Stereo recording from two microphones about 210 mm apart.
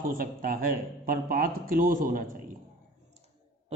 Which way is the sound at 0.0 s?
40° right (ahead or behind).